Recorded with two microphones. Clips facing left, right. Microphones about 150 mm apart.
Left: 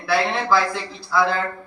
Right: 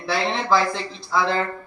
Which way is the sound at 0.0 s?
20° right (ahead or behind).